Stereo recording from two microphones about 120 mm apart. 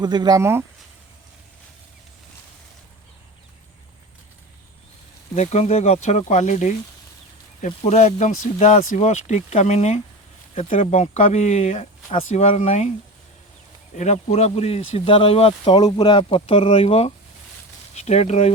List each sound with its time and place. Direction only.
0.0 s speech: 35° right (ahead or behind)
5.3 s speech: 70° left (ahead or behind); by 6.7 s 85° left
7.6 s speech: 70° left (ahead or behind)
13.9 s speech: 70° left (ahead or behind); by 15.7 s 55° left (ahead or behind)
15.7 s speech: 35° left (ahead or behind); by 18.5 s 65° left (ahead or behind)